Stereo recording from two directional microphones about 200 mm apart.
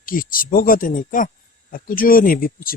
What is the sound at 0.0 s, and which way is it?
Speech, 45° left (ahead or behind).